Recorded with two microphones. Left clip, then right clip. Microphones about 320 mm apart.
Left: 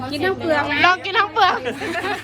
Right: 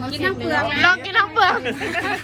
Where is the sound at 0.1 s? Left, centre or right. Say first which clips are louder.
Left 2 dB; left.